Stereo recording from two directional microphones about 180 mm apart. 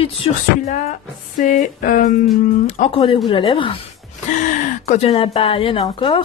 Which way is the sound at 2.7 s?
35° left (ahead or behind).